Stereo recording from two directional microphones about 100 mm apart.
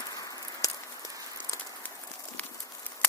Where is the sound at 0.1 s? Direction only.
35° left (ahead or behind).